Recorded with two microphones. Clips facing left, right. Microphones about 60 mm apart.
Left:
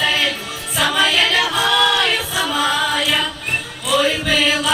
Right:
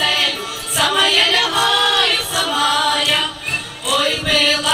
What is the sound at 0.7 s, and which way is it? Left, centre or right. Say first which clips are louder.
Choir: even; centre.